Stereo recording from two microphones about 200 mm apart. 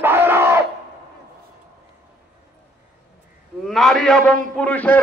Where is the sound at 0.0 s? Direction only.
10° right (ahead or behind).